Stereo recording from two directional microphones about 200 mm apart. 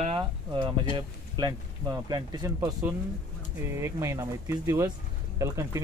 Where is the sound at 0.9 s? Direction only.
20° right (ahead or behind).